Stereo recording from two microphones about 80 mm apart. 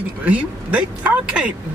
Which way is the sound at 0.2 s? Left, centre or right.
Centre.